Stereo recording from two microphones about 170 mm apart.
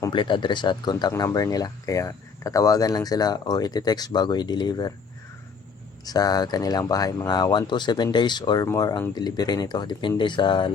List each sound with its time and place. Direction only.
0.0 s speech: 30° left (ahead or behind)
6.1 s speech: 25° left (ahead or behind)